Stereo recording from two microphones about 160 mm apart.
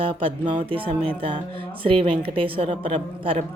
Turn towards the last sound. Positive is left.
turn(degrees=-35)  # may be behind; listen again after turning